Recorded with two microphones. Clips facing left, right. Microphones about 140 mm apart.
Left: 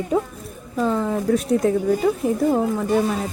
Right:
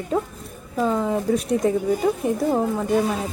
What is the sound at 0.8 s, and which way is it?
Speech, 5° right (ahead or behind).